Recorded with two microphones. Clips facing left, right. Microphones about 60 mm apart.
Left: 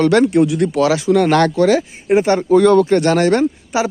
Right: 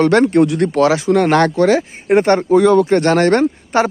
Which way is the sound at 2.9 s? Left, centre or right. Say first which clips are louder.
Right 1 dB; right.